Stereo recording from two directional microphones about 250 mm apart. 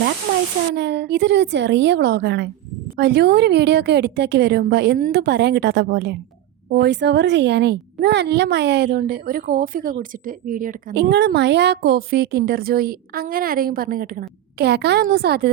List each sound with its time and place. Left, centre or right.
0.8 s a woman's voice: right